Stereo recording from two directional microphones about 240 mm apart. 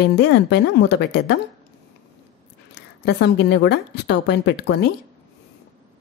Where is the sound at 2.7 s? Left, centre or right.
Left.